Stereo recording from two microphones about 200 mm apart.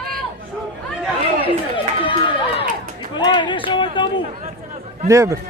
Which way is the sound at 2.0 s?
25° left (ahead or behind).